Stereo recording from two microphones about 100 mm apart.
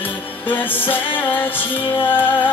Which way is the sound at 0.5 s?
20° left (ahead or behind).